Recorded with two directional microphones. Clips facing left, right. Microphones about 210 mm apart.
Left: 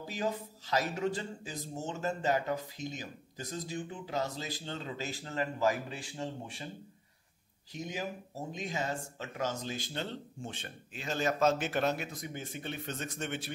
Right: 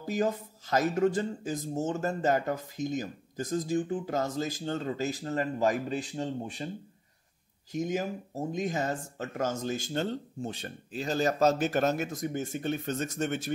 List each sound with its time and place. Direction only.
0.0 s speech: 45° right (ahead or behind)
7.7 s speech: 45° right (ahead or behind)